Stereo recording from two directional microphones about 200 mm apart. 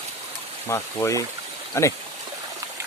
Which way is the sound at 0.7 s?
15° left (ahead or behind).